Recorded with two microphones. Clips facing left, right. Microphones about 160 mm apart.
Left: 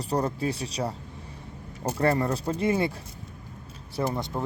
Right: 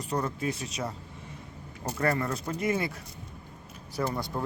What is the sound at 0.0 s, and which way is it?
Speech, 35° left (ahead or behind).